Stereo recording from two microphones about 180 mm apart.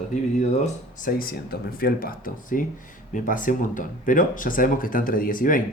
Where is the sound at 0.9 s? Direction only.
50° left (ahead or behind).